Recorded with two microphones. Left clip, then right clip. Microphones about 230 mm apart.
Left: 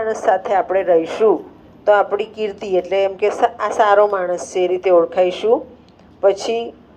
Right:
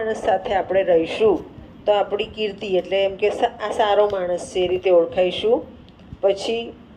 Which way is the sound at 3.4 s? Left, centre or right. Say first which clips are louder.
Left 5 dB; centre.